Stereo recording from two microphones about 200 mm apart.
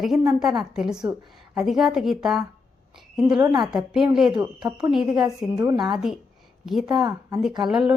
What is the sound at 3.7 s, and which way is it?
A woman's voice, 5° right (ahead or behind).